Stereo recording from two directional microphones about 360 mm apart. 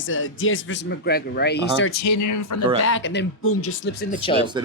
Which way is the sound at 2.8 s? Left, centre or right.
Left.